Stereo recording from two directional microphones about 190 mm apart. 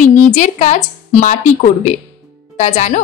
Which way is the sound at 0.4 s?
40° left (ahead or behind).